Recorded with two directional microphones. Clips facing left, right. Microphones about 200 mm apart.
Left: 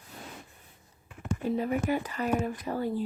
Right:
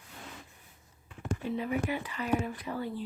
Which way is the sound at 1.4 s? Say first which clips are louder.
Left 4 dB; 45° left (ahead or behind).